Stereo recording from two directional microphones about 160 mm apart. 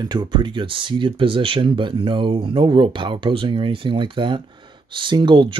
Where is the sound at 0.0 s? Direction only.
30° right (ahead or behind).